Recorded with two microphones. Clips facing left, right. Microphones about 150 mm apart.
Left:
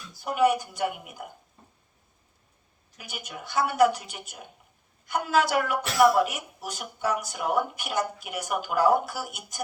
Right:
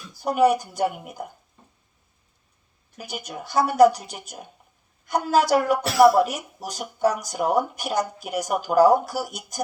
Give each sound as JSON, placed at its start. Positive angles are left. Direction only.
{"t": 0.2, "sound": "a woman's voice", "side_deg": -40}
{"t": 3.0, "sound": "a woman's voice", "side_deg": -40}